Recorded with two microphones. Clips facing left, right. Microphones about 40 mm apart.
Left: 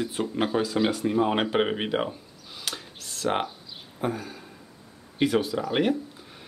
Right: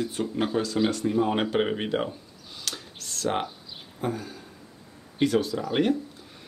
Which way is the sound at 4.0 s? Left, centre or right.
Centre.